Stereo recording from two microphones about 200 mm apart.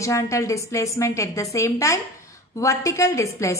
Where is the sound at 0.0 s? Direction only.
15° left (ahead or behind).